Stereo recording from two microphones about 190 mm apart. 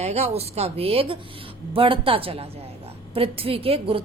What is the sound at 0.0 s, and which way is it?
A woman's voice, 35° right (ahead or behind).